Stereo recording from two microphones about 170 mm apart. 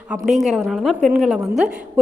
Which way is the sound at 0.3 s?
Centre (ahead or behind).